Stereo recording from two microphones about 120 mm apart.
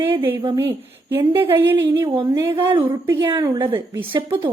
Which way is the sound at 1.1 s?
20° right (ahead or behind).